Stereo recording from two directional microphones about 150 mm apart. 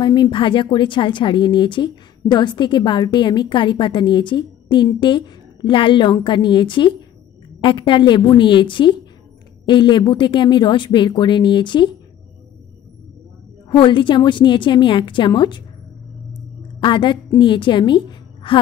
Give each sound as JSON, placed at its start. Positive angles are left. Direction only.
{"t": 0.0, "sound": "a woman's voice", "side_deg": 30}
{"t": 13.7, "sound": "a woman's voice", "side_deg": 35}
{"t": 16.8, "sound": "a woman's voice", "side_deg": 30}